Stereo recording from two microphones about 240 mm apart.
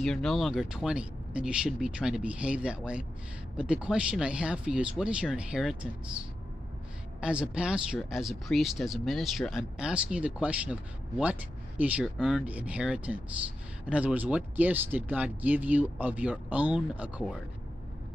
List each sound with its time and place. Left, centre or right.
0.0 s speech: centre
7.2 s speech: centre